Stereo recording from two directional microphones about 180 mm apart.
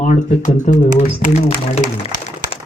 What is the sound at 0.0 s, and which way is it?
Speech, 45° left (ahead or behind).